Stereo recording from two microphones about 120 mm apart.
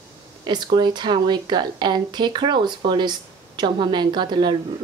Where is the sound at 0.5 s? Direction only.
40° right (ahead or behind).